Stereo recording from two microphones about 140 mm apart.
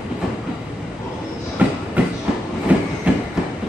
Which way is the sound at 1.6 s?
10° right (ahead or behind).